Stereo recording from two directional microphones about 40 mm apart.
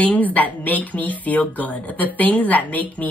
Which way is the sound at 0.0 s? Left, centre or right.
Left.